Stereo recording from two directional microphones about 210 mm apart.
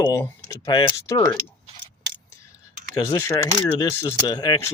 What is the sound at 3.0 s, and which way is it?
Speech, 15° left (ahead or behind).